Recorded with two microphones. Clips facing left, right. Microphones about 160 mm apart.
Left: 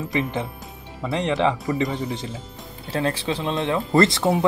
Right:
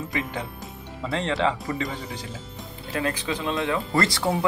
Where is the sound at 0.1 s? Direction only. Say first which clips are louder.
Left 5 dB; 20° left (ahead or behind).